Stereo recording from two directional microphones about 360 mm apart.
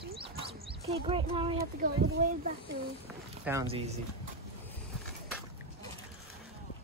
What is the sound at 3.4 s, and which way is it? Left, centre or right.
Speech, centre.